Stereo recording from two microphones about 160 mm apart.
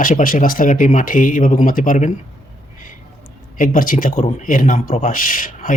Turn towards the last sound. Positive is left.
turn(degrees=55)  # may be behind; listen again after turning